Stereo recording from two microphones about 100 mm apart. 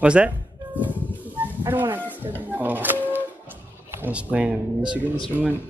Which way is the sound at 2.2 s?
15° right (ahead or behind).